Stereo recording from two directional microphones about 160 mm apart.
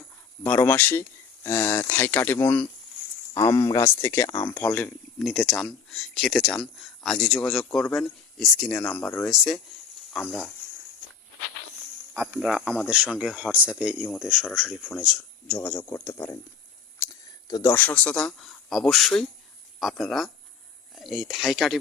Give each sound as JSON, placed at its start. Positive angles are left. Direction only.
{"t": 0.4, "sound": "speech", "side_deg": 10}
{"t": 12.1, "sound": "speech", "side_deg": -15}
{"t": 17.5, "sound": "speech", "side_deg": 20}